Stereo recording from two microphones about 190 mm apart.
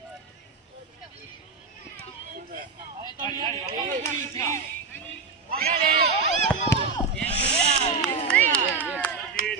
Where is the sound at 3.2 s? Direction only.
20° left (ahead or behind).